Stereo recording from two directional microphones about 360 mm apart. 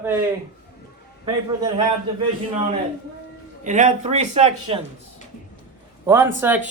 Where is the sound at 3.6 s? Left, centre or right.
Centre.